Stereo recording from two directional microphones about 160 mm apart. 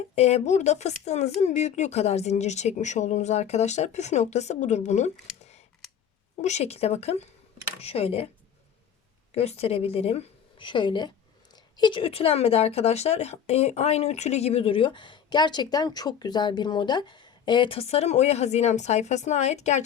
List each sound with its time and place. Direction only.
0.2 s speech: 40° left (ahead or behind)
5.4 s a sound: 40° left (ahead or behind)
6.4 s a woman's voice: 45° left (ahead or behind)
9.3 s a woman's voice: 40° left (ahead or behind)